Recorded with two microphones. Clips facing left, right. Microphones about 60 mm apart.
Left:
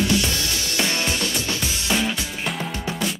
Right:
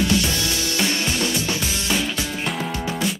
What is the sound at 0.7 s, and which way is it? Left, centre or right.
Music, left.